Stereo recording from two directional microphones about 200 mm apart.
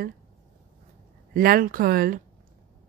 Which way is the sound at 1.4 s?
45° right (ahead or behind).